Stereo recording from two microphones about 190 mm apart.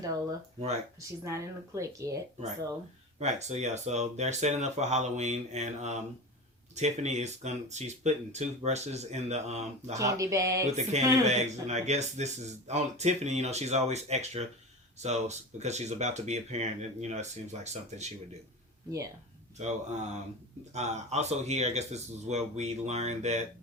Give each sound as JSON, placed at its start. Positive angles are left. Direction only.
{"t": 0.0, "sound": "speech", "side_deg": -20}
{"t": 3.2, "sound": "speech", "side_deg": -35}
{"t": 10.0, "sound": "speech", "side_deg": -15}
{"t": 10.9, "sound": "speech", "side_deg": -35}
{"t": 19.5, "sound": "speech", "side_deg": -40}